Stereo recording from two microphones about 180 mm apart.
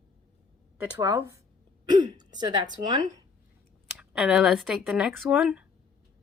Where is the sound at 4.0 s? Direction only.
5° right (ahead or behind).